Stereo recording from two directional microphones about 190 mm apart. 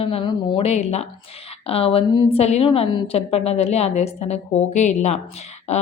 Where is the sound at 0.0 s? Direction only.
30° left (ahead or behind).